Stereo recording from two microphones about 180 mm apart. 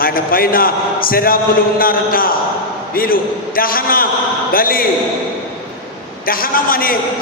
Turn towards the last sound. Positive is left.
turn(degrees=55)  # may be behind; listen again after turning